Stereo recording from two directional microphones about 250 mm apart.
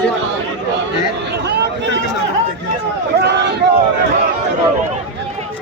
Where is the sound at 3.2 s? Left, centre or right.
Right.